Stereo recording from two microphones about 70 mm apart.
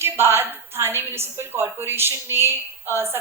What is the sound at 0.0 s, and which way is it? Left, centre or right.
A woman's voice, right.